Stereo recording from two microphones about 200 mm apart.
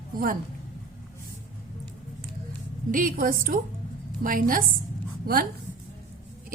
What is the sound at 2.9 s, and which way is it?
A woman's voice, 45° right (ahead or behind).